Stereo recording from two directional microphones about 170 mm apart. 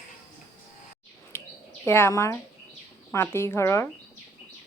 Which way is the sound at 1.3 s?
10° left (ahead or behind).